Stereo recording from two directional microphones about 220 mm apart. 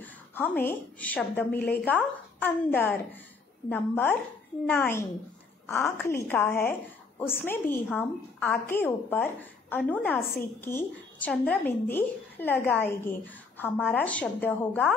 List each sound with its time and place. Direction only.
0.0 s a woman's voice: 10° left (ahead or behind)